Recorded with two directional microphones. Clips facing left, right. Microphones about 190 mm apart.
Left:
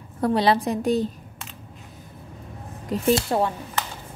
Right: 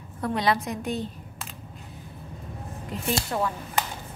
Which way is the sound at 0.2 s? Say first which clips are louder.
Left 5 dB; 35° left (ahead or behind).